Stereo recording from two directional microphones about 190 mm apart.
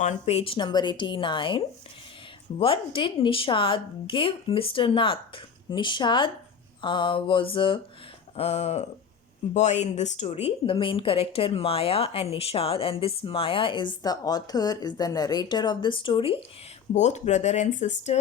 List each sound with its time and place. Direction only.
0.0 s a woman's voice: 35° left (ahead or behind)
16.9 s speech: 40° left (ahead or behind)